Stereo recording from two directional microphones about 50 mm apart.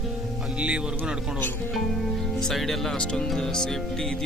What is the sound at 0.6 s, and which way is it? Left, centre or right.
Speech, right.